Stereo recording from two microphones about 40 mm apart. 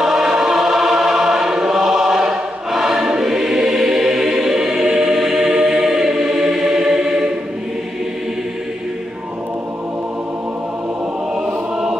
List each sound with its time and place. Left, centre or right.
0.0 s choir: centre
11.4 s choir: centre